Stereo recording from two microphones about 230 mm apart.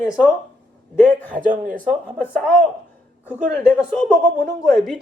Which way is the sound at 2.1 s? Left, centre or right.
Centre.